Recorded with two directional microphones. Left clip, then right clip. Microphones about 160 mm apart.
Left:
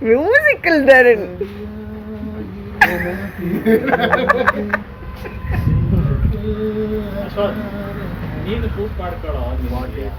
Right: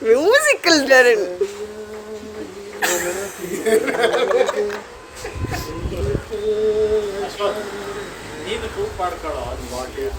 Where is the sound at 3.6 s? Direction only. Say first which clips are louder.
Left 2 dB; 25° right (ahead or behind).